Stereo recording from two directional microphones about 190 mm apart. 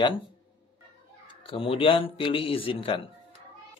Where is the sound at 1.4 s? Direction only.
30° left (ahead or behind).